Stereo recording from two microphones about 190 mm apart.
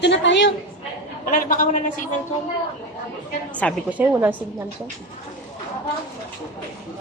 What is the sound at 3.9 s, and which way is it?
Speech, 10° right (ahead or behind).